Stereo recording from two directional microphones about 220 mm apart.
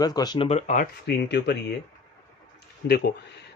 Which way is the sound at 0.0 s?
15° left (ahead or behind).